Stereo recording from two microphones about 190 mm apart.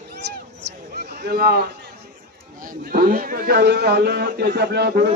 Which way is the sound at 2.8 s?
55° right (ahead or behind).